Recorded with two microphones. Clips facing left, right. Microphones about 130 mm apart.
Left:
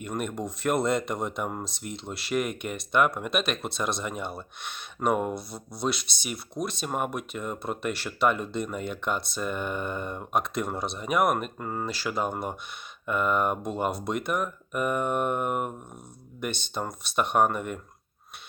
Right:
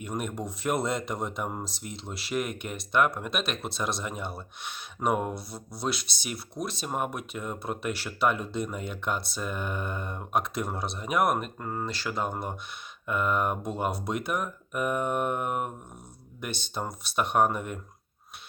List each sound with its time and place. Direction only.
0.0 s speech: 5° right (ahead or behind)